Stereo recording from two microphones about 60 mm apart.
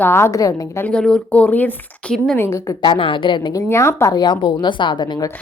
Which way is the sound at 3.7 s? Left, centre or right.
Left.